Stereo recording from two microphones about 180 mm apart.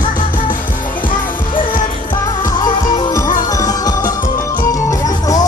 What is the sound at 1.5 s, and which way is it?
Music, 50° left (ahead or behind).